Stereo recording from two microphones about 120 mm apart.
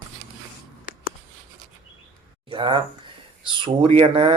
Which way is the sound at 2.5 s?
45° right (ahead or behind).